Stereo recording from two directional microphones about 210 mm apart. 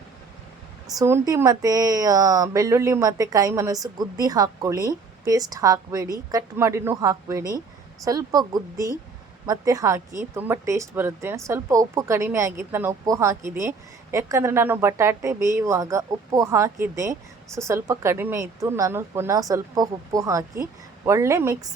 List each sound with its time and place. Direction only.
0.9 s speech: 15° right (ahead or behind)